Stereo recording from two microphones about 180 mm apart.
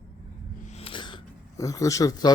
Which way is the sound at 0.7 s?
30° left (ahead or behind).